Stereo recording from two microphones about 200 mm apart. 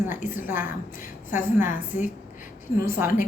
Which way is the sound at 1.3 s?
40° left (ahead or behind).